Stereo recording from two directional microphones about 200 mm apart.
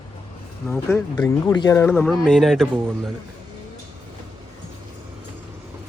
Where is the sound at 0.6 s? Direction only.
5° left (ahead or behind).